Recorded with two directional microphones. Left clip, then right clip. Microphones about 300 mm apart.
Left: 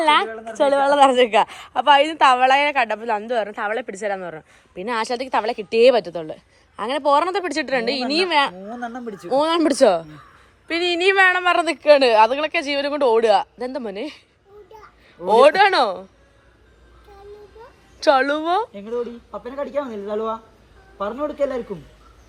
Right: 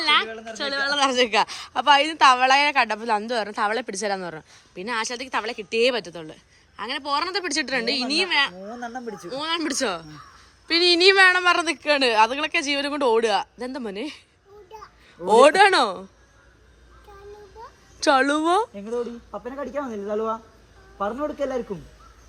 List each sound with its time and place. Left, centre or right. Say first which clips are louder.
0.0 s a sound: left 4 dB; centre
0.6 s a woman's voice: left 8 dB; centre
8.8 s speech: left 2 dB; centre
9.3 s a woman's voice: left 9 dB; centre
15.3 s a woman's voice: left 1 dB; centre
18.0 s a woman's voice: left 2 dB; centre
19.3 s speech: left 4 dB; centre